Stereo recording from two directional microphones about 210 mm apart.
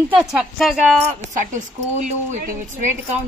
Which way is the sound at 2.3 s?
35° right (ahead or behind).